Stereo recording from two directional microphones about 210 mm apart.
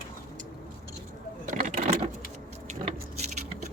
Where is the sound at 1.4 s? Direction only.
30° right (ahead or behind).